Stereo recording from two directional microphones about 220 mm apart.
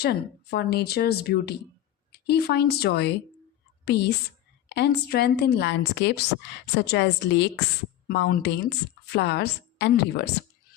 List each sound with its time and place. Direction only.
0.0 s speech: 45° left (ahead or behind)